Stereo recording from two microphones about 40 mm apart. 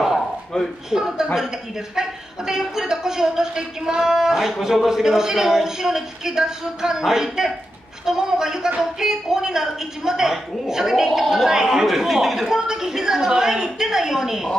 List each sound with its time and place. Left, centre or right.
0.8 s a man's voice: centre